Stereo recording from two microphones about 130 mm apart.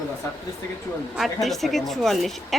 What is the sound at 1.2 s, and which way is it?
Speech, centre (ahead or behind).